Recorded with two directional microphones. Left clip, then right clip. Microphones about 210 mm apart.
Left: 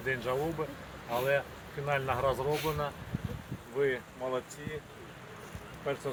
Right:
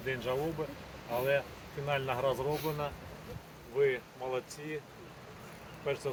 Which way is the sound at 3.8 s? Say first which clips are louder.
Right 1 dB; 35° right (ahead or behind).